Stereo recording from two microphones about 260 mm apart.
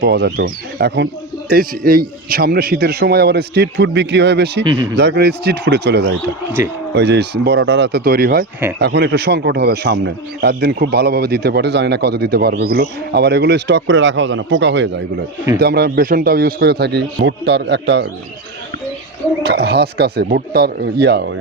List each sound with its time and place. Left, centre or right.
0.0 s a man's voice: right
4.6 s speech: centre
4.9 s a man's voice: right
6.6 s a man's voice: centre
6.9 s a man's voice: right
19.4 s a man's voice: right